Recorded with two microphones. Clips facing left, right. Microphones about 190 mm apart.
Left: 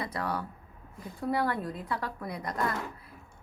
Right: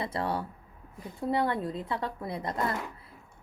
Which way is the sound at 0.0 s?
25° right (ahead or behind).